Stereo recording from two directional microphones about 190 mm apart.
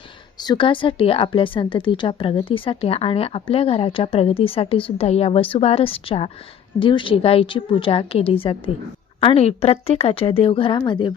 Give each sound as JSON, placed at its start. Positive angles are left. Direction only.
{"t": 0.3, "sound": "speech", "side_deg": 25}